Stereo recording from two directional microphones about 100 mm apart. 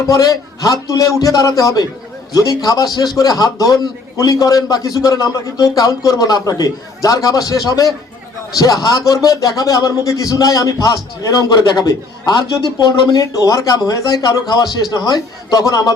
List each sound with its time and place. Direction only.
0.1 s a man's voice: 35° left (ahead or behind)